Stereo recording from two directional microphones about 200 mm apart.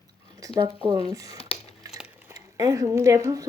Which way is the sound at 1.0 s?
20° right (ahead or behind).